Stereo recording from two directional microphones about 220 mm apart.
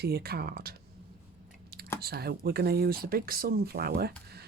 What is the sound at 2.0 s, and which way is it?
Speech, 45° right (ahead or behind).